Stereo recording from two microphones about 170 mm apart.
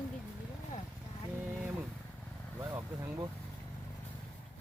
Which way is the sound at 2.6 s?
20° right (ahead or behind).